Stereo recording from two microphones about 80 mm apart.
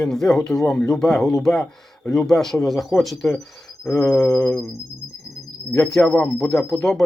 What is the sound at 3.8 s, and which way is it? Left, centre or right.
Mantra, left.